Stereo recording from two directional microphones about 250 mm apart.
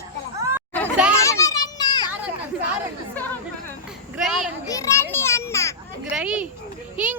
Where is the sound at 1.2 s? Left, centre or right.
Centre.